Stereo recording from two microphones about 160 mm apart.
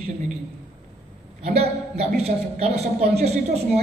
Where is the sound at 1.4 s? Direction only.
40° right (ahead or behind).